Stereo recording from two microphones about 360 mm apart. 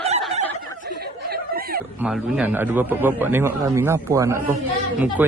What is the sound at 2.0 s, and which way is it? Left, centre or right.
A man's voice, centre.